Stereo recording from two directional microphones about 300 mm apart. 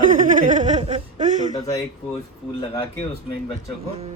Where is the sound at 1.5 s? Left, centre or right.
Centre.